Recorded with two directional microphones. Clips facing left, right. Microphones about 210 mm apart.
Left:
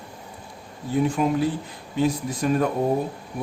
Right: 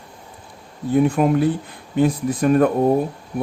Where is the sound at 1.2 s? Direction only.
55° right (ahead or behind).